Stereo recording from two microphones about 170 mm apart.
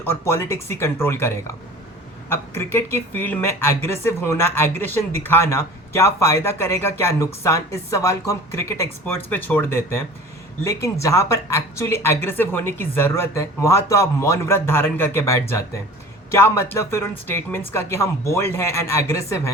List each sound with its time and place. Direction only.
0.0 s speech: 15° left (ahead or behind)
2.3 s speech: 15° left (ahead or behind)